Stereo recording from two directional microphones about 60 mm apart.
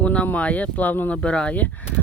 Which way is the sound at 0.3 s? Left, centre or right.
Left.